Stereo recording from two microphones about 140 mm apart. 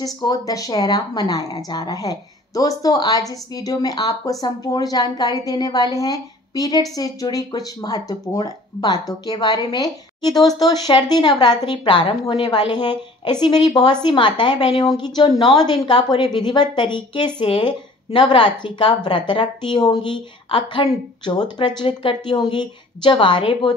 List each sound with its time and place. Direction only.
0.0 s speech: 25° left (ahead or behind)